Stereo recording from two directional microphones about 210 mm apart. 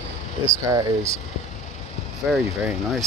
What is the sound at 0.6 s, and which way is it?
Speech, 15° right (ahead or behind).